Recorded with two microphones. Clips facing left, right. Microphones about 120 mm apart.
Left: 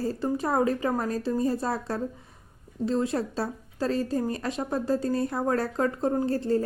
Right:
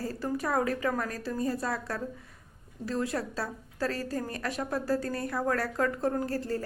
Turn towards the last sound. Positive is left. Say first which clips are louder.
# left 5 dB
turn(degrees=25)  # may be behind; listen again after turning